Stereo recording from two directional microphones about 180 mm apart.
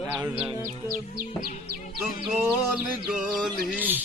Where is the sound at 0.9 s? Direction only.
55° right (ahead or behind).